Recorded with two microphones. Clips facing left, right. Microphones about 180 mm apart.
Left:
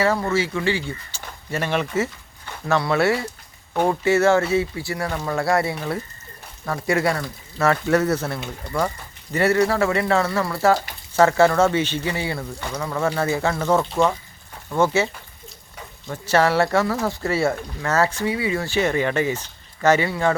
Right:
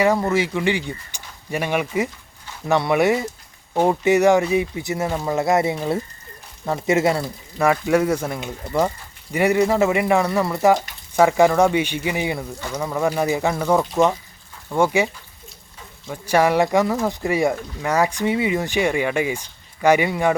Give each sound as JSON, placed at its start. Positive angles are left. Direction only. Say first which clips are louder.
{"t": 0.0, "sound": "speech", "louder": "right 2 dB", "side_deg": -15}
{"t": 7.7, "sound": "speech", "louder": "right 1 dB", "side_deg": -10}